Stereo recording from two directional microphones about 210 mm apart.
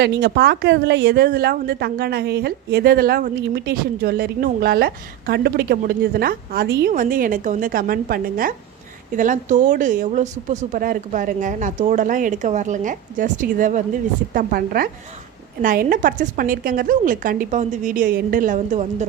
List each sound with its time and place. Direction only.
0.0 s a woman's voice: 50° right (ahead or behind); by 19.0 s 35° right (ahead or behind)